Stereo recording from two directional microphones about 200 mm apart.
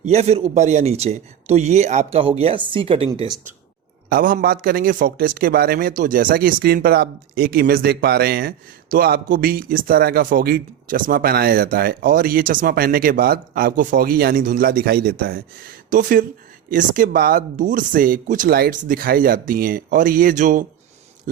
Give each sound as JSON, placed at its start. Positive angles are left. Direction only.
{"t": 0.0, "sound": "speech", "side_deg": -30}
{"t": 4.1, "sound": "a man's voice", "side_deg": -45}